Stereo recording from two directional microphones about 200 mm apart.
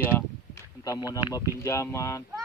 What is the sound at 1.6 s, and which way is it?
Speech, 15° left (ahead or behind).